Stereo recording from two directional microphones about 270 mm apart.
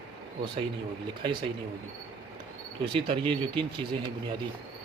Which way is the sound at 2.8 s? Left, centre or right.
Centre.